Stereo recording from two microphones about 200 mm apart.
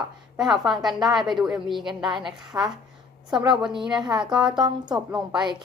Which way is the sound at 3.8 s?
20° right (ahead or behind).